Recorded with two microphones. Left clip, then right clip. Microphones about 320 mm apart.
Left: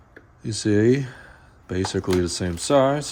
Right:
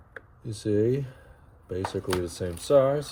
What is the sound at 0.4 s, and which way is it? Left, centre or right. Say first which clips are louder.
Speech: left 6 dB; left.